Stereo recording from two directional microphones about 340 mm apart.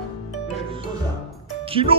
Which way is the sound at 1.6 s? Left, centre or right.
Centre.